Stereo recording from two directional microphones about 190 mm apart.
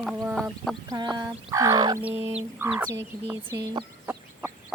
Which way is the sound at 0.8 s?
20° right (ahead or behind).